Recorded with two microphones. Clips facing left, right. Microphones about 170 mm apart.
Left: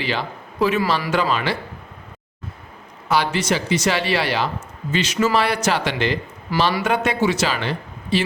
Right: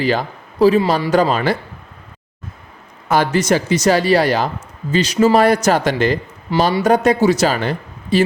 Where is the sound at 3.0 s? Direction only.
50° right (ahead or behind).